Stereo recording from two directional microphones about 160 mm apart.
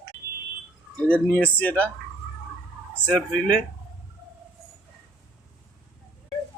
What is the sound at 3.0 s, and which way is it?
Speech, 5° left (ahead or behind).